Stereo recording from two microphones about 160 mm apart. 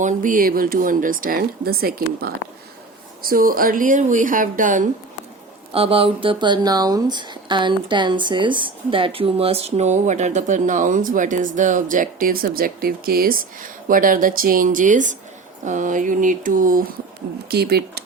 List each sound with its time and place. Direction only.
0.0 s speech: 55° right (ahead or behind)
5.7 s speech: 35° right (ahead or behind); by 16.8 s 55° right (ahead or behind)
17.5 s speech: 85° right